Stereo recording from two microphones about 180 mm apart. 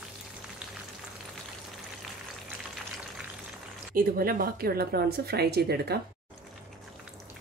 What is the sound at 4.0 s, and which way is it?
Speech, 55° right (ahead or behind).